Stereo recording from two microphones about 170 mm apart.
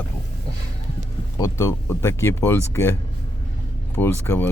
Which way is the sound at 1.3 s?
15° left (ahead or behind).